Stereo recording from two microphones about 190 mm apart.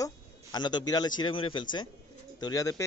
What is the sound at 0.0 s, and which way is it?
A man's voice, 20° left (ahead or behind).